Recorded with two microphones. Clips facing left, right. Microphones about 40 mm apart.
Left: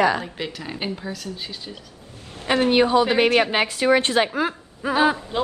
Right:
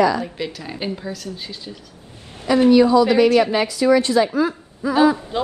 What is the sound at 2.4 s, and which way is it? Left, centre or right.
A woman's voice, left.